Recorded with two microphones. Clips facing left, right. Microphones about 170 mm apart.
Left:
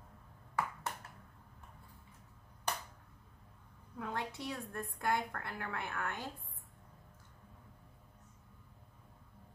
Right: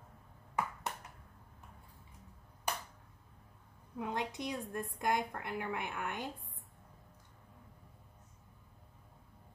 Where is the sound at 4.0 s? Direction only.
20° right (ahead or behind).